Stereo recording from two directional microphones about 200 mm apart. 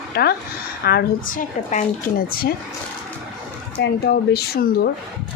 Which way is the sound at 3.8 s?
50° left (ahead or behind).